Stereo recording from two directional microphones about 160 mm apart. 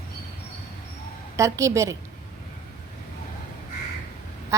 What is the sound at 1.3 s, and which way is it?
Speech, 20° right (ahead or behind).